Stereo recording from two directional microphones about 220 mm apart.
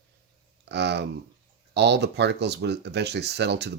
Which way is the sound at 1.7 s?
50° right (ahead or behind).